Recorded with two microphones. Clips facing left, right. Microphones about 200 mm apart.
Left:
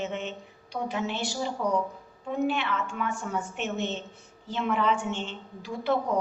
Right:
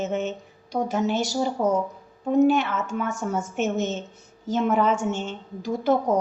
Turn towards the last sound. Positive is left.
turn(degrees=-45)  # may be behind; listen again after turning